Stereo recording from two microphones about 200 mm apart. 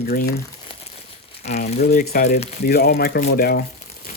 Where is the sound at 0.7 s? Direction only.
30° left (ahead or behind).